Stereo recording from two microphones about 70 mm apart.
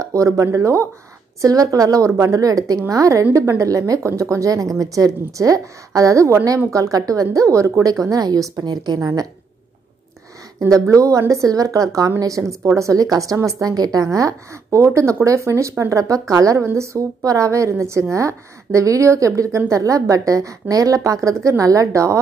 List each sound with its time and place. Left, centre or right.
0.0 s a woman's voice: right
9.0 s a woman's voice: right
10.7 s a woman's voice: right
17.2 s a woman's voice: right